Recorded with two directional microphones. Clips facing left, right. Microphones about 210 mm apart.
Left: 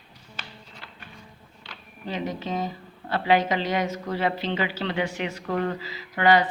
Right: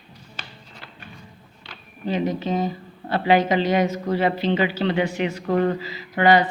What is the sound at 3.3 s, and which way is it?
A woman's voice, 20° right (ahead or behind).